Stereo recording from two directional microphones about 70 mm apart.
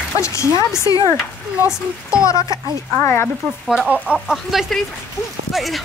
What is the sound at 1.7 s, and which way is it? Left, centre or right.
Speech, centre.